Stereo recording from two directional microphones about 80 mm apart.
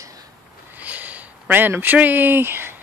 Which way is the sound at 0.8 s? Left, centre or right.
Centre.